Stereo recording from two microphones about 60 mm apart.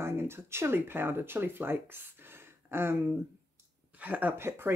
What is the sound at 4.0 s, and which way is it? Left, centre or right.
Speech, right.